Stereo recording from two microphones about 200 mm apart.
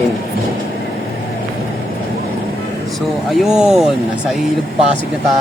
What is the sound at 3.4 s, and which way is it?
Speech, centre (ahead or behind).